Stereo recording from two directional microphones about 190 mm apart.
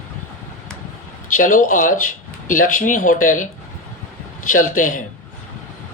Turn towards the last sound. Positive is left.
turn(degrees=45)  # may be behind; listen again after turning